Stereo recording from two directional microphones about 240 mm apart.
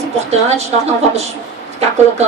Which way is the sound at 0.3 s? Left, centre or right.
Right.